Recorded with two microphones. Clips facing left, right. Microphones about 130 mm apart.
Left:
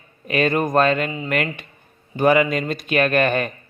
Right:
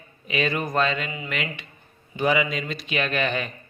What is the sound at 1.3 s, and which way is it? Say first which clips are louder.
Speech: left 7 dB; 50° left (ahead or behind).